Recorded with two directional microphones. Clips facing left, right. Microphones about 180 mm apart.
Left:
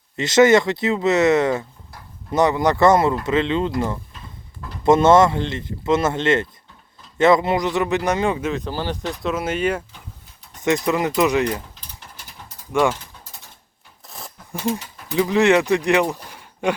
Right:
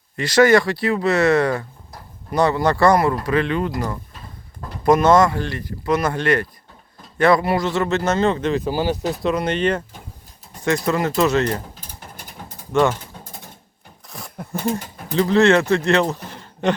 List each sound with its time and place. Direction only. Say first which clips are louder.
0.2 s speech: even; 20° left (ahead or behind)
4.8 s speech: left 1 dB; 25° left (ahead or behind); by 8.6 s 5° left (ahead or behind)
8.6 s speech: right 5 dB; 10° right (ahead or behind)
9.2 s speech: right 2 dB; 5° left (ahead or behind)
10.8 s speech: right 2 dB; 15° left (ahead or behind)
11.9 s mechanisms: right 4 dB; 50° right (ahead or behind)
12.7 s speech: right 2 dB; 10° left (ahead or behind)
14.1 s a sound: right 2 dB; centre (ahead or behind)
14.7 s pigeon: left 1 dB; 50° right (ahead or behind)
15.1 s speech: right 1 dB; 15° left (ahead or behind)